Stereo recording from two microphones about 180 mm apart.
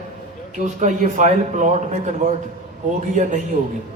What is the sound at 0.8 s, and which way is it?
A man's voice, 45° right (ahead or behind).